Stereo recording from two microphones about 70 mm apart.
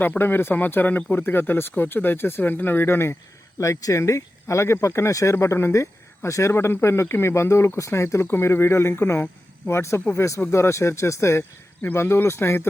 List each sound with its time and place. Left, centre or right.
0.2 s speech: left